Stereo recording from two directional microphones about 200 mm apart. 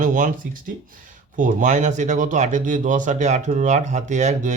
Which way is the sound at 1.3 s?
40° right (ahead or behind).